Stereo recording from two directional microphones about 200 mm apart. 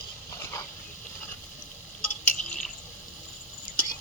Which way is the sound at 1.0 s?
10° left (ahead or behind).